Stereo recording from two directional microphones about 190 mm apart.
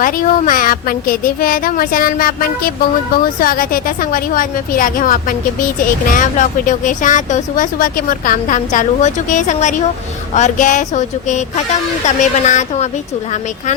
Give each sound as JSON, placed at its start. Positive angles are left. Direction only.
{"t": 0.0, "sound": "speech", "side_deg": 45}